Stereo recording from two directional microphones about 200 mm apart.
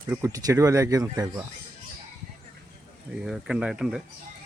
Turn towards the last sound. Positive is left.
turn(degrees=-5)  # may be behind; listen again after turning